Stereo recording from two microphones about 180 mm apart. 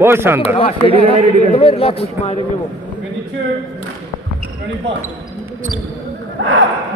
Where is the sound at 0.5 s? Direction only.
30° left (ahead or behind).